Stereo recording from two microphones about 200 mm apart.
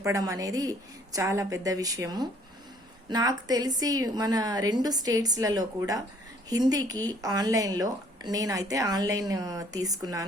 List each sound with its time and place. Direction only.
0.0 s a woman's voice: 15° right (ahead or behind)